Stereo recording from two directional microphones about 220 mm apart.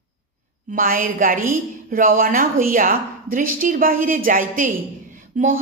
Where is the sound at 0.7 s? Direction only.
40° right (ahead or behind).